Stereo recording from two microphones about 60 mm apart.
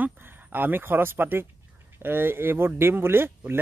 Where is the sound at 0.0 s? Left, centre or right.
Right.